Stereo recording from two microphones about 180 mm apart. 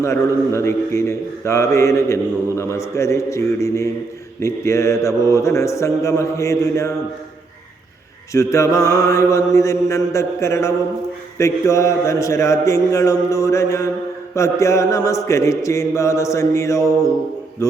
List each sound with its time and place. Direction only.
0.0 s speech: 15° left (ahead or behind)
8.3 s a man's voice: 15° left (ahead or behind)